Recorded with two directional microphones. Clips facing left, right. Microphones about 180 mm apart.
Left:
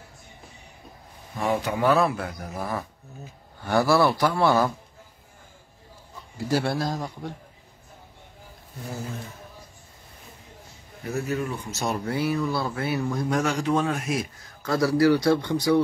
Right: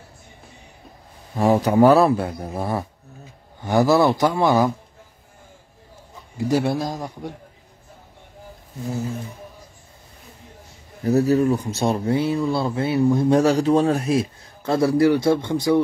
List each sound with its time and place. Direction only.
1.3 s speech: 35° right (ahead or behind)
3.6 s speech: 20° right (ahead or behind)
6.3 s speech: 20° right (ahead or behind)
11.0 s speech: 40° right (ahead or behind); by 15.8 s 20° right (ahead or behind)